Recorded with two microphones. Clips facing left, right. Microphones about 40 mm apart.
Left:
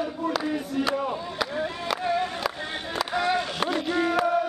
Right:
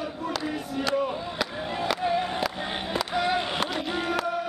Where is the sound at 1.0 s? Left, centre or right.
Centre.